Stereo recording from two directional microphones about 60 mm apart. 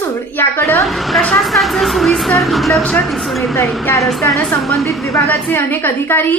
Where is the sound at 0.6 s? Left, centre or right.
Left.